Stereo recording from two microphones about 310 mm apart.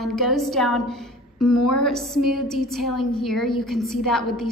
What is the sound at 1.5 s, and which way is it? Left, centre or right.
Speech, left.